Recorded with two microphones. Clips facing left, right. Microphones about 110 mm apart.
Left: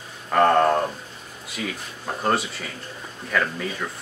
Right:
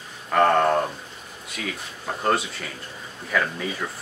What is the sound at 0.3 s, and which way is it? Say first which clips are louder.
Speech: left 1 dB; centre (ahead or behind).